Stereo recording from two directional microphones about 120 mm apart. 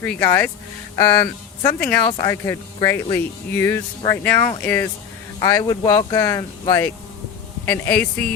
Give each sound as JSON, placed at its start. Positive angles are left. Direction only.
{"t": 0.0, "sound": "speech", "side_deg": 10}
{"t": 2.0, "sound": "speech", "side_deg": 25}
{"t": 5.4, "sound": "speech", "side_deg": 30}
{"t": 7.9, "sound": "speech", "side_deg": 15}